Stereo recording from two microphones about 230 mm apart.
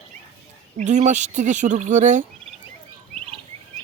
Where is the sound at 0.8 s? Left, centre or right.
Right.